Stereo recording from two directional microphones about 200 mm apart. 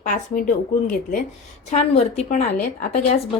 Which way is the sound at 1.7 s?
35° left (ahead or behind).